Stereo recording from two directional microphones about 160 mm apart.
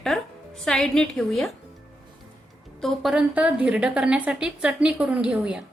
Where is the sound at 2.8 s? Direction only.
Centre (ahead or behind).